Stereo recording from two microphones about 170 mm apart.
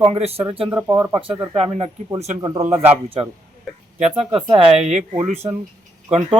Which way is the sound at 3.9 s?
35° right (ahead or behind).